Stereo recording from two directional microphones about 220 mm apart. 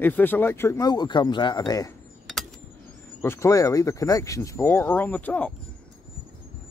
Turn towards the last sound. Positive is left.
turn(degrees=5)  # may be behind; listen again after turning